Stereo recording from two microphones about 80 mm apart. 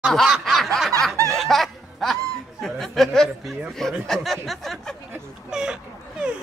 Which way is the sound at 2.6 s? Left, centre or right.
Centre.